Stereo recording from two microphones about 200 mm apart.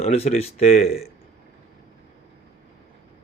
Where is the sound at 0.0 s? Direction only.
30° left (ahead or behind).